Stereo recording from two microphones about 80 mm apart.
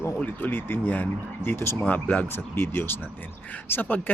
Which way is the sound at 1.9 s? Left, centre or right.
Centre.